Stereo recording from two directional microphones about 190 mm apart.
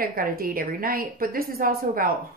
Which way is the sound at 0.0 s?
50° right (ahead or behind).